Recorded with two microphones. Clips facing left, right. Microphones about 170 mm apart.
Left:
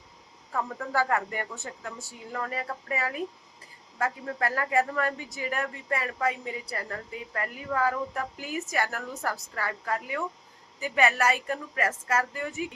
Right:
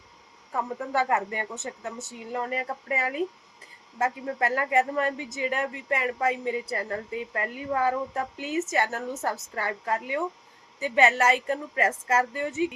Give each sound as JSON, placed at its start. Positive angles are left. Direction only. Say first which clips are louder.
{"t": 0.5, "sound": "a woman's voice", "louder": "right 1 dB", "side_deg": -20}